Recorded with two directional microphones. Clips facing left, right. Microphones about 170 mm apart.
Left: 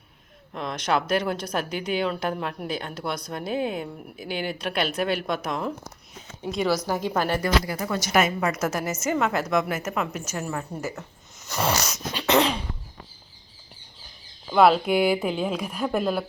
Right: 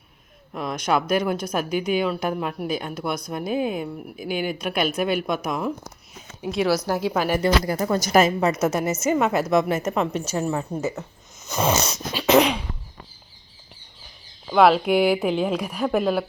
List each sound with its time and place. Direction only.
0.5 s speech: 10° right (ahead or behind)
7.6 s a woman's voice: 40° right (ahead or behind); by 12.4 s 20° right (ahead or behind)
14.5 s speech: centre (ahead or behind)